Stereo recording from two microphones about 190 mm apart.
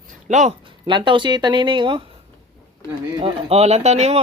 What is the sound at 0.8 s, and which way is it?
Speech, 25° right (ahead or behind).